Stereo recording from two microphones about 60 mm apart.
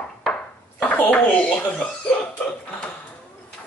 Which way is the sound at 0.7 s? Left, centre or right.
Left.